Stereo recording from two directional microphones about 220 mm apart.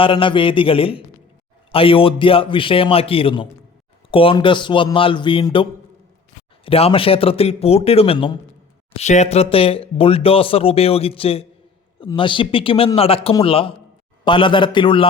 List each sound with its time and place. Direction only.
0.0 s speech: 25° left (ahead or behind)
6.7 s speech: 25° left (ahead or behind)